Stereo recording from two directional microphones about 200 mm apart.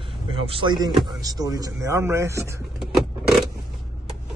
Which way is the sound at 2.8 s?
Centre (ahead or behind).